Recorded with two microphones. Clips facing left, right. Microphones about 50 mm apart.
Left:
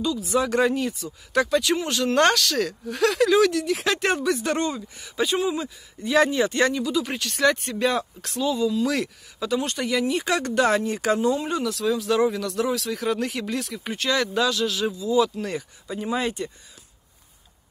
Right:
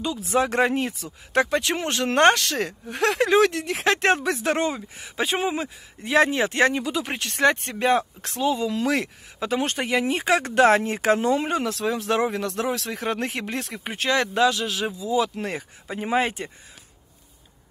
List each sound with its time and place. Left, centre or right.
0.3 s speech: right
4.6 s speech: right
15.3 s speech: right